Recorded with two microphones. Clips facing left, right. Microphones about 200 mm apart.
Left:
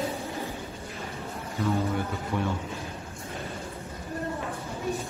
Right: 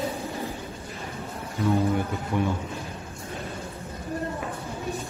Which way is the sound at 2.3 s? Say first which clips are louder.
Right 4 dB; 15° right (ahead or behind).